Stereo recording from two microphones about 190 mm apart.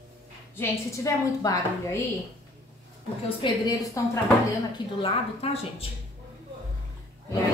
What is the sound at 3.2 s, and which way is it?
Speech, 25° left (ahead or behind).